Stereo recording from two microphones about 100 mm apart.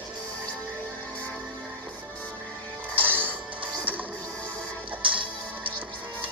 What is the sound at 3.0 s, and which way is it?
Music, 20° right (ahead or behind).